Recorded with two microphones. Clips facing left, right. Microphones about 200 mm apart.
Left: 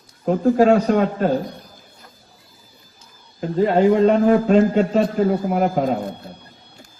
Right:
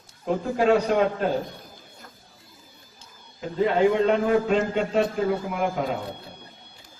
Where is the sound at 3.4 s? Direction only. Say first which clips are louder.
Left 5 dB; 45° left (ahead or behind).